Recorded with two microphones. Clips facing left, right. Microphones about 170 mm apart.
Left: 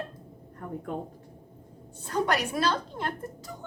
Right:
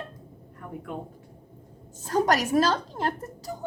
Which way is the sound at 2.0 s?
40° right (ahead or behind).